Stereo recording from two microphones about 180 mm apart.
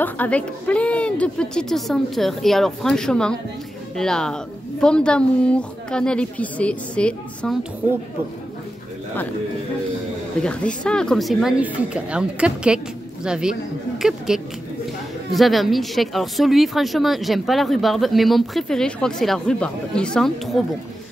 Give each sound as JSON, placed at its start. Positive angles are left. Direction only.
{"t": 0.0, "sound": "speech", "side_deg": 10}
{"t": 10.4, "sound": "speech", "side_deg": 5}